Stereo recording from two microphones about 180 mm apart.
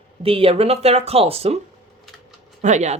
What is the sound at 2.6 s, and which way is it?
Speech, 40° right (ahead or behind).